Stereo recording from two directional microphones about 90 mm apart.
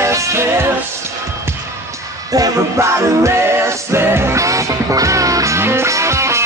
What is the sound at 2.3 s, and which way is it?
Music, 35° right (ahead or behind).